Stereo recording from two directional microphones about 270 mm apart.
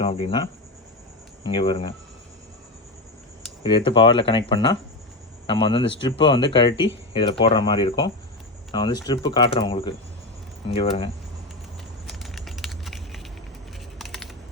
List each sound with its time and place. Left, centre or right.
0.0 s speech: centre
1.5 s speech: centre
3.6 s speech: centre
12.0 s a sound: centre
14.0 s computer keyboard: centre